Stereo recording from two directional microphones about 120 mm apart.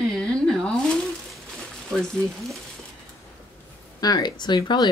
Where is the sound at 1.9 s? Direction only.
5° left (ahead or behind).